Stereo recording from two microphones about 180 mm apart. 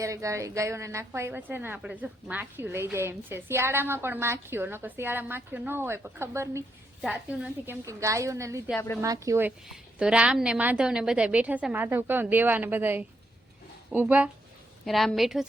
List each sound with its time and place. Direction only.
0.0 s a woman's voice: 15° right (ahead or behind)
9.6 s a woman's voice: 5° right (ahead or behind)